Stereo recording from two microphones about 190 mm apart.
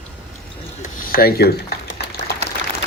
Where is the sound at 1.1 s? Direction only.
55° left (ahead or behind).